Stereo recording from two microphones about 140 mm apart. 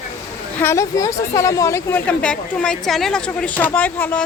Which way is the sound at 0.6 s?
20° left (ahead or behind).